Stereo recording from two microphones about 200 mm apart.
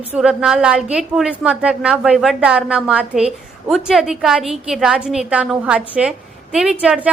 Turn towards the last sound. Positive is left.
turn(degrees=-5)  # may be behind; listen again after turning